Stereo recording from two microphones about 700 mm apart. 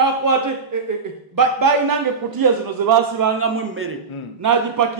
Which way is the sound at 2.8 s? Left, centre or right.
Right.